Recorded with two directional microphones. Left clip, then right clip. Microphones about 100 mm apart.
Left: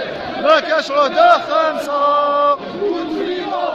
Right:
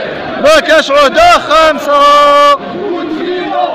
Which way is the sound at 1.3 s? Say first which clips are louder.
Right 8 dB; 40° right (ahead or behind).